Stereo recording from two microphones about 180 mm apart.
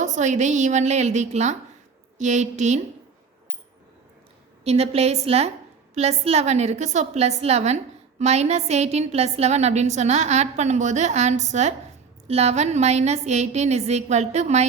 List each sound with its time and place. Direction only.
0.0 s a woman's voice: 40° right (ahead or behind)
4.6 s a woman's voice: 35° right (ahead or behind)